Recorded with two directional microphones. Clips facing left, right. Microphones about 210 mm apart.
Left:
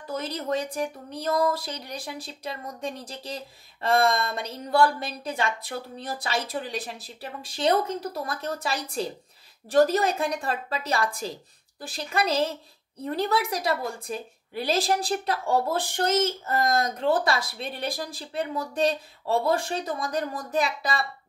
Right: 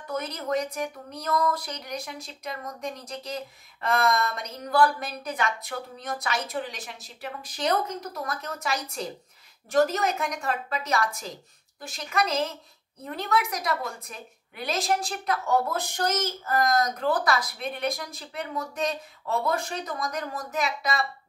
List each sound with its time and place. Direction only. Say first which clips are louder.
0.1 s a woman's voice: even; 30° left (ahead or behind)